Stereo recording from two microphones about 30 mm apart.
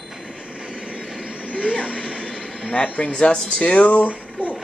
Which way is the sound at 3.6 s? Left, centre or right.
Left.